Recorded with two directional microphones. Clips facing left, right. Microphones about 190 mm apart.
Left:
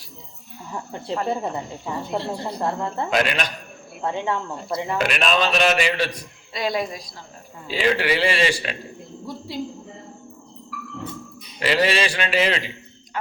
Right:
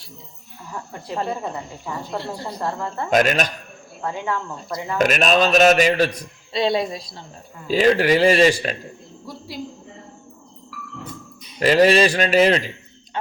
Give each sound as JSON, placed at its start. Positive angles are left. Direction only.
{"t": 2.1, "sound": "speech", "side_deg": 25}
{"t": 3.1, "sound": "a man's voice", "side_deg": -45}
{"t": 4.0, "sound": "speech", "side_deg": 25}
{"t": 4.9, "sound": "a man's voice", "side_deg": -45}
{"t": 6.5, "sound": "speech", "side_deg": -25}
{"t": 7.7, "sound": "a man's voice", "side_deg": -45}
{"t": 11.6, "sound": "a man's voice", "side_deg": -45}